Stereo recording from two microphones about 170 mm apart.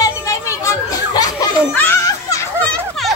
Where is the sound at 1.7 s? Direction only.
15° left (ahead or behind).